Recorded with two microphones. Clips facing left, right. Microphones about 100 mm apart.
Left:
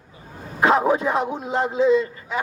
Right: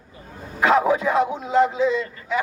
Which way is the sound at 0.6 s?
30° left (ahead or behind).